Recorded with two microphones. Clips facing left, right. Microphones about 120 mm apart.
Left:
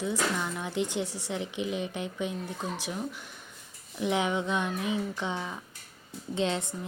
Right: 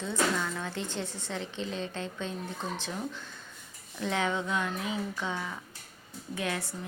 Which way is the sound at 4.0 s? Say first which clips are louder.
Left 2 dB; 15° left (ahead or behind).